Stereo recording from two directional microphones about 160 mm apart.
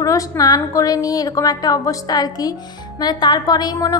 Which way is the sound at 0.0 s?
20° left (ahead or behind).